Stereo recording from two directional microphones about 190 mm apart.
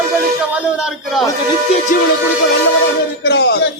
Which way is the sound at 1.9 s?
45° left (ahead or behind).